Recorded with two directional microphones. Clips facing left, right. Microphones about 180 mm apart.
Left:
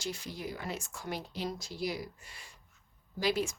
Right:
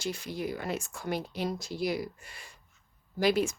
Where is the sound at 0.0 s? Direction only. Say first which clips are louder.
Right 5 dB; 60° right (ahead or behind).